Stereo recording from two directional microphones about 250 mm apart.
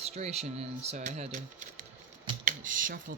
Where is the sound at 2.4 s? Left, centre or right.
Right.